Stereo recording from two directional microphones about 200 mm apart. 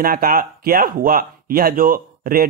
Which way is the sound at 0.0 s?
45° right (ahead or behind).